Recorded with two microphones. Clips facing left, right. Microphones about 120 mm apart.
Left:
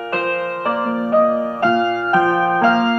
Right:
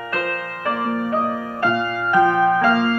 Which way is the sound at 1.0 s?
35° left (ahead or behind).